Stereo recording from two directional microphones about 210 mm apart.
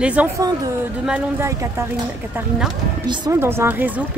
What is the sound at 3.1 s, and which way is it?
Speech, 15° right (ahead or behind).